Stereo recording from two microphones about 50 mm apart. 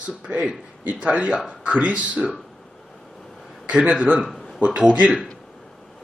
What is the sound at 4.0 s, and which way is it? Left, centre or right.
Speech, right.